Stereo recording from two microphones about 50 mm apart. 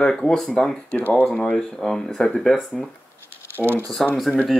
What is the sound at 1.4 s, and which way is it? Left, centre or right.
Speech, centre.